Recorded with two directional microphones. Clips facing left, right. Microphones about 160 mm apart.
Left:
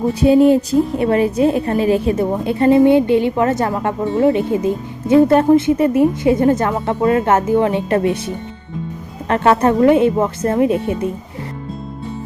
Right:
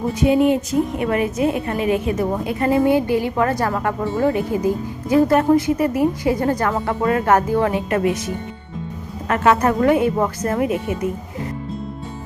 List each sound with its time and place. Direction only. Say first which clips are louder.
0.1 s a woman's voice: left 5 dB; 35° left (ahead or behind)
9.2 s a woman's voice: left 3 dB; 30° left (ahead or behind)